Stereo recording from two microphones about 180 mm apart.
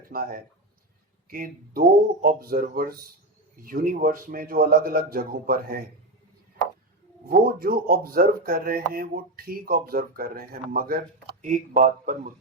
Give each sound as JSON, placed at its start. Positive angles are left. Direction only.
{"t": 0.0, "sound": "speech", "side_deg": -55}
{"t": 7.3, "sound": "speech", "side_deg": -55}